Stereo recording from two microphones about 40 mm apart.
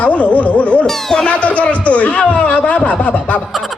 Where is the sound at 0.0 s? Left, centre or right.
Left.